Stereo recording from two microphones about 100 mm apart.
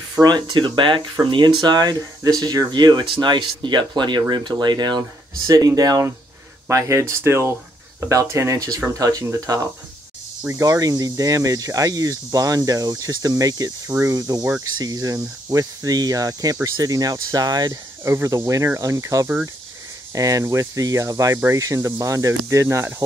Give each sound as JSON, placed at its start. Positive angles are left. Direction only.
{"t": 0.2, "sound": "speech", "side_deg": -50}
{"t": 5.5, "sound": "speech", "side_deg": -35}
{"t": 10.4, "sound": "speech", "side_deg": -35}
{"t": 18.0, "sound": "speech", "side_deg": -30}